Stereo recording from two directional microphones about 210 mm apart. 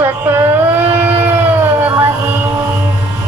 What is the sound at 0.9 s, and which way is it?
Music, 10° right (ahead or behind).